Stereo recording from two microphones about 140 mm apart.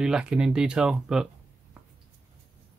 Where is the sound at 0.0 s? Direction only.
5° right (ahead or behind).